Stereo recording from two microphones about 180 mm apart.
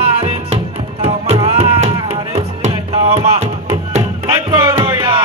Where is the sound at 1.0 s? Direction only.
35° right (ahead or behind).